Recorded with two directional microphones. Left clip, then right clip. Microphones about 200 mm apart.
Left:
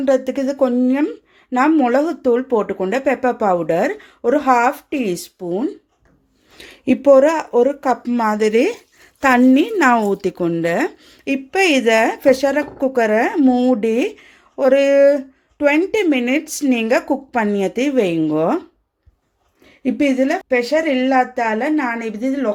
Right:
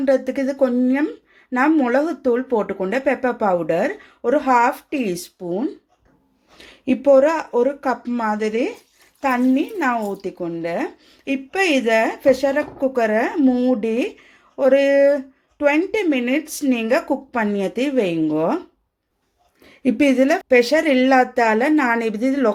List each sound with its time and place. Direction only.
0.0 s speech: 10° left (ahead or behind)
6.6 s speech: 25° left (ahead or behind)
19.6 s a woman's voice: 15° right (ahead or behind)